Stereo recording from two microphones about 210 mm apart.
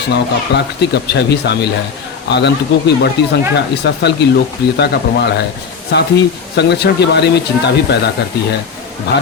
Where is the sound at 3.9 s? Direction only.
55° left (ahead or behind).